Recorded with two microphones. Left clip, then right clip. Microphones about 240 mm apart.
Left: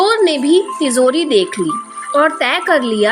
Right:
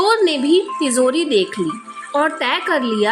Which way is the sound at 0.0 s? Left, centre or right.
Centre.